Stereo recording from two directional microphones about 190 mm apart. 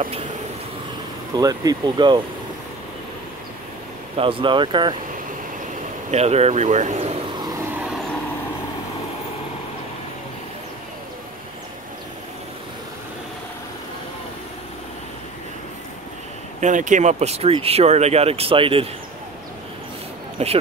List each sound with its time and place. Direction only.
1.3 s speech: 20° right (ahead or behind)
4.2 s speech: 25° right (ahead or behind)
6.1 s speech: 35° right (ahead or behind)
16.5 s speech: 40° right (ahead or behind)
20.4 s speech: 30° right (ahead or behind)